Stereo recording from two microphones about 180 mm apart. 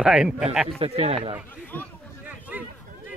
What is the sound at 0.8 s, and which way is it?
Speech, 35° right (ahead or behind).